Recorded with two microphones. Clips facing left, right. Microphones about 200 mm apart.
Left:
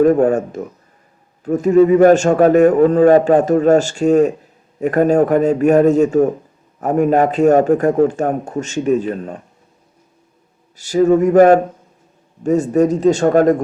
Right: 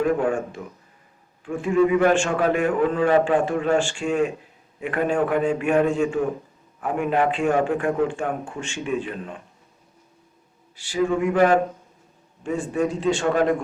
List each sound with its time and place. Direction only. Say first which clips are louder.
0.0 s a man's voice: left 9 dB; 40° left (ahead or behind)
10.8 s a man's voice: left 10 dB; 40° left (ahead or behind)